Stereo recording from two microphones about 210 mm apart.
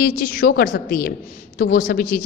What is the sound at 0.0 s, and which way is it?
A woman's voice, 45° left (ahead or behind).